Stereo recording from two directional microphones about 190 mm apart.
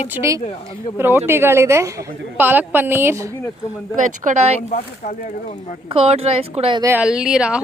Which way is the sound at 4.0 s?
40° right (ahead or behind).